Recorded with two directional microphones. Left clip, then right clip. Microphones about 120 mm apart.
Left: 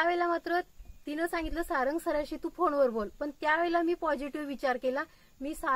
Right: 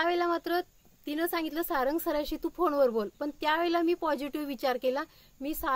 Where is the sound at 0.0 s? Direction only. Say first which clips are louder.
Even; 30° right (ahead or behind).